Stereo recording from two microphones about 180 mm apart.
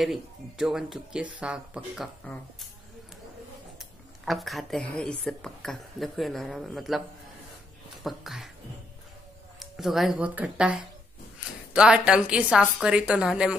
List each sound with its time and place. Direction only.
0.0 s a woman's voice: centre (ahead or behind)
4.2 s a woman's voice: centre (ahead or behind)
8.0 s a woman's voice: centre (ahead or behind)
9.6 s a woman's voice: centre (ahead or behind)